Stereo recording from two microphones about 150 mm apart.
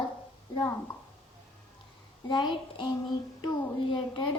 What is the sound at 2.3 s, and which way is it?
Speech, 30° left (ahead or behind).